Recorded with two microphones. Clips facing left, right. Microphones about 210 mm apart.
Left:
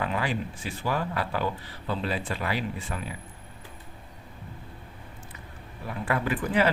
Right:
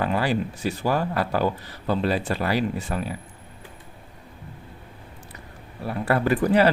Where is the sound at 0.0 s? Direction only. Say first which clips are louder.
Right 6 dB; 35° right (ahead or behind).